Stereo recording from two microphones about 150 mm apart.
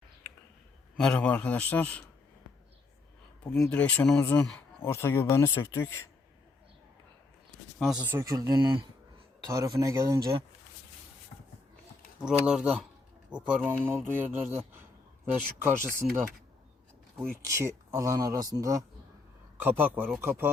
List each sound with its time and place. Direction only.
0.9 s speech: 5° left (ahead or behind)
3.5 s speech: 5° left (ahead or behind)
7.8 s speech: centre (ahead or behind)
8.0 s speech: 15° right (ahead or behind)
8.4 s speech: 25° right (ahead or behind)
12.2 s speech: 5° right (ahead or behind)
17.3 s speech: 20° right (ahead or behind)
19.6 s speech: 10° right (ahead or behind)